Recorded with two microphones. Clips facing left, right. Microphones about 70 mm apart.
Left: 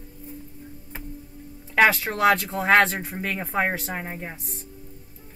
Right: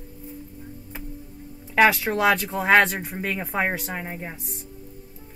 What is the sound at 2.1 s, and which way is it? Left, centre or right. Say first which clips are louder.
Speech: left 1 dB; centre.